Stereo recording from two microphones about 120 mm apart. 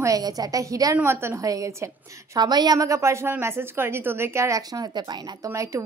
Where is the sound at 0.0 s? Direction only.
30° right (ahead or behind).